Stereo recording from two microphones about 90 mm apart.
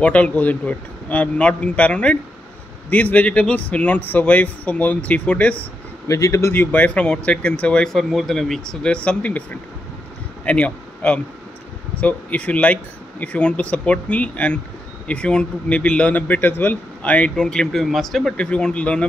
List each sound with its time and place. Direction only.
0.0 s speech: 15° left (ahead or behind)
6.0 s speech: 35° left (ahead or behind)
6.5 s speech: 20° left (ahead or behind)
10.4 s speech: 15° left (ahead or behind)